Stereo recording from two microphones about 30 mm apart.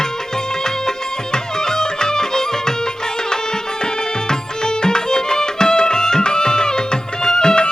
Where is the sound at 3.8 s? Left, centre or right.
Left.